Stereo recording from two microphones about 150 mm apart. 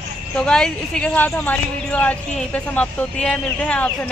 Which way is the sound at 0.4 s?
5° left (ahead or behind).